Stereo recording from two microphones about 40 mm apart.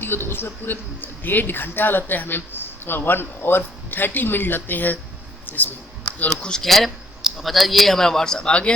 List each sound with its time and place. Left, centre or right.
0.0 s speech: left
6.6 s speech: centre
7.2 s a man's voice: centre; by 8.7 s left